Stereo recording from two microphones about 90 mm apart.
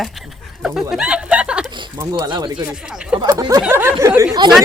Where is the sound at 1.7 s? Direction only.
60° right (ahead or behind).